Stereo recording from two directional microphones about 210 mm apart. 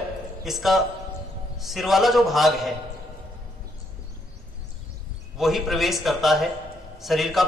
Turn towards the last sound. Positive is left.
turn(degrees=0)  # may be behind; listen again after turning